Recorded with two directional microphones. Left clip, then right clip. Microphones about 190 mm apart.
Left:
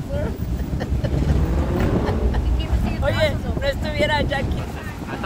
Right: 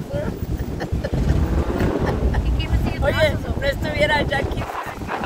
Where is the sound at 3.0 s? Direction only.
35° right (ahead or behind).